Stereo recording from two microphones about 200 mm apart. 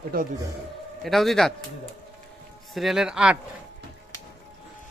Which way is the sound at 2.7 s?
Centre (ahead or behind).